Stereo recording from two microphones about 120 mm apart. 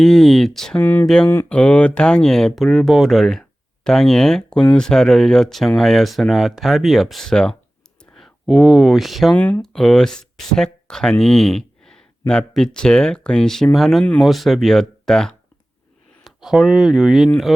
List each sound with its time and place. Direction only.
0.0 s speech: centre (ahead or behind)
0.8 s speech: 15° left (ahead or behind); by 9.3 s centre (ahead or behind)
9.3 s speech: 15° left (ahead or behind)
9.6 s speech: 5° left (ahead or behind)